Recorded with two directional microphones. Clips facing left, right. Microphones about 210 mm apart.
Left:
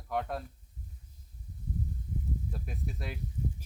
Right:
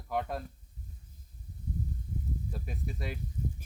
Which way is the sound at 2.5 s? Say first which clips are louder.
Right 1 dB; centre (ahead or behind).